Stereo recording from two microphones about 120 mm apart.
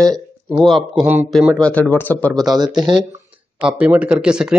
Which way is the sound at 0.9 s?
15° right (ahead or behind).